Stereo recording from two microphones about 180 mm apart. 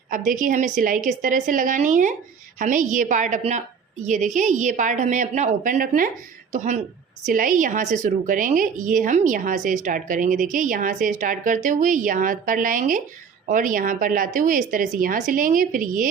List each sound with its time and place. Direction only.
0.1 s speech: 45° right (ahead or behind)